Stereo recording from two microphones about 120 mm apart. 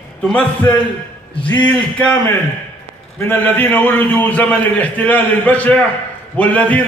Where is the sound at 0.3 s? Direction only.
15° left (ahead or behind).